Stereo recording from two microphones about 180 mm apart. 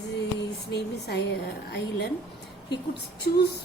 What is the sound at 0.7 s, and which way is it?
Speech, 65° left (ahead or behind).